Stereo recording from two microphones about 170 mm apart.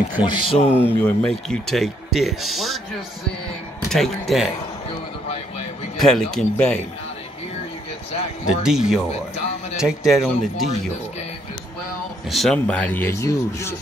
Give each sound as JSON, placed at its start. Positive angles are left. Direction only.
{"t": 0.2, "sound": "speech", "side_deg": 30}
{"t": 0.7, "sound": "speech", "side_deg": 10}
{"t": 3.9, "sound": "speech", "side_deg": 0}
{"t": 5.9, "sound": "speech", "side_deg": 0}
{"t": 8.5, "sound": "speech", "side_deg": -5}
{"t": 12.3, "sound": "speech", "side_deg": 0}